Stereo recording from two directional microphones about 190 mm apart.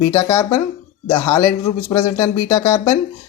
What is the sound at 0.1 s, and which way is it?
A man's voice, 15° left (ahead or behind).